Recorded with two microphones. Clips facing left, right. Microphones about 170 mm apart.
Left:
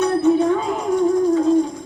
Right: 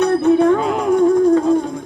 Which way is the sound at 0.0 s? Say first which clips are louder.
Right 3 dB; 60° right (ahead or behind).